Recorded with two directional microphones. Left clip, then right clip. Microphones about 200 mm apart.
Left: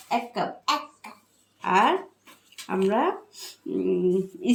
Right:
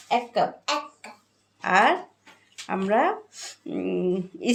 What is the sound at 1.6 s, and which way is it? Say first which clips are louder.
Speech: right 1 dB; 30° right (ahead or behind).